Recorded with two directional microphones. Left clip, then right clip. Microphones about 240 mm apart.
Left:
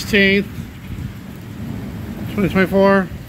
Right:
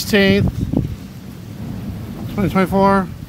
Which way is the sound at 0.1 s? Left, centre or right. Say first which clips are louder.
Left 1 dB; right.